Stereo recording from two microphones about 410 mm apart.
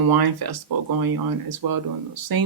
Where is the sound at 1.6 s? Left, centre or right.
Right.